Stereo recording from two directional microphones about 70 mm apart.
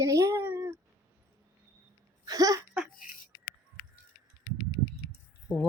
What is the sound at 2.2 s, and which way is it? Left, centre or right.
Speech, right.